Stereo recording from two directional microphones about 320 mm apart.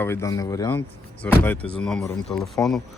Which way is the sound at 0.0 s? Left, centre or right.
Centre.